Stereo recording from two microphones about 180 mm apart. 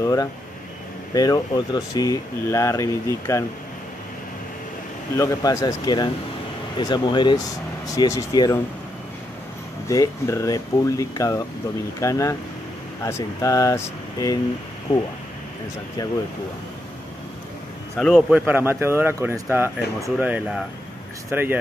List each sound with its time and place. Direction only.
0.0 s speech: 20° left (ahead or behind)
5.1 s speech: 15° left (ahead or behind)
9.8 s speech: 15° left (ahead or behind)
17.9 s a man's voice: 5° left (ahead or behind)
18.3 s speech: 10° right (ahead or behind)